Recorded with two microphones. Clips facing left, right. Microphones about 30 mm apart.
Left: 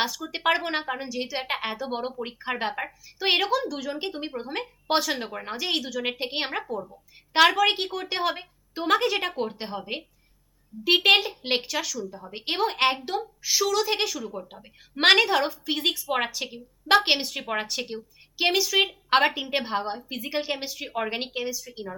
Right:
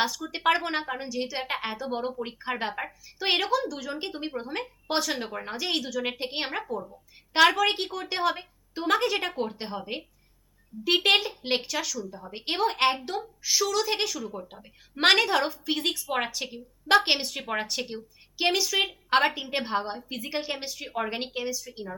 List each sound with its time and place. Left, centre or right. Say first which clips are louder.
0.0 s a woman's voice: even; centre
2.2 s a woman's voice: left 2 dB; centre
15.0 s a woman's voice: left 2 dB; centre